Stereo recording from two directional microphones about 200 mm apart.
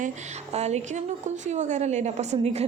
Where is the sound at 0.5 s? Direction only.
35° right (ahead or behind).